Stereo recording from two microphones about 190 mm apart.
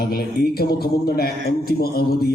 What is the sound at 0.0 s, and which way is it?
A man's voice, 55° left (ahead or behind).